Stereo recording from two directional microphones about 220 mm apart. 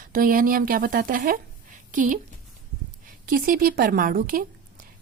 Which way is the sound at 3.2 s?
40° right (ahead or behind).